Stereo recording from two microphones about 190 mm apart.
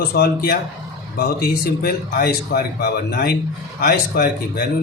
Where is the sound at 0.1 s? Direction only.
55° left (ahead or behind).